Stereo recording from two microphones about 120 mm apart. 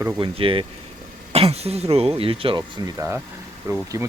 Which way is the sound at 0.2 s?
50° right (ahead or behind).